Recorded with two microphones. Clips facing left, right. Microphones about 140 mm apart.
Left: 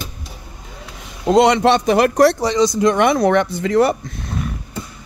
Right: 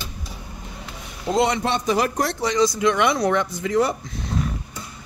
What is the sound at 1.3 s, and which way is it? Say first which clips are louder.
Speech: left 8 dB; 90° left.